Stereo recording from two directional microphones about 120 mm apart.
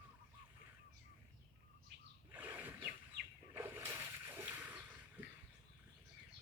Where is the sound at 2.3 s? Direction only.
15° right (ahead or behind).